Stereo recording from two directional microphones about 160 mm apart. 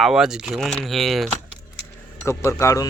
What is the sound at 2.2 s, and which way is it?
Speech, 15° left (ahead or behind).